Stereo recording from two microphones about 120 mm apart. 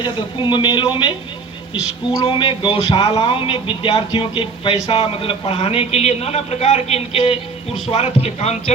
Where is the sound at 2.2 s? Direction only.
45° left (ahead or behind).